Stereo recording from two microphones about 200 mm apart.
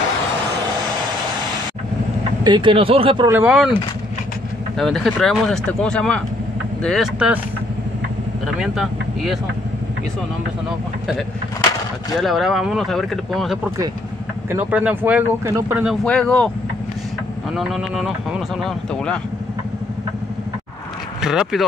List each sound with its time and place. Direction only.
2.4 s speech: 25° right (ahead or behind)
3.3 s speech: 5° right (ahead or behind)
8.5 s speech: centre (ahead or behind)
12.2 s speech: centre (ahead or behind)
15.8 s speech: centre (ahead or behind)
17.6 s speech: centre (ahead or behind)
21.2 s speech: 5° right (ahead or behind)